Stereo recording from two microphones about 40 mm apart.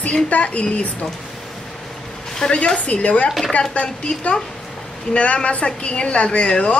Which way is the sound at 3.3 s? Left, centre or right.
Centre.